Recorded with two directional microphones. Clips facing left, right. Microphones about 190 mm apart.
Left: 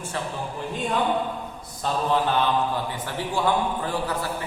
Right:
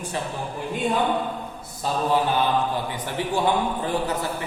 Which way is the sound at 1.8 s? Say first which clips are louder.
Right 1 dB; 5° right (ahead or behind).